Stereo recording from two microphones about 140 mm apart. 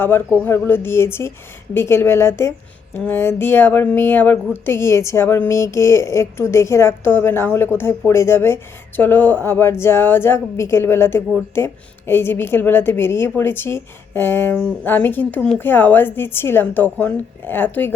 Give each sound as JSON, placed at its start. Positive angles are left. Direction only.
{"t": 0.0, "sound": "a woman's voice", "side_deg": 15}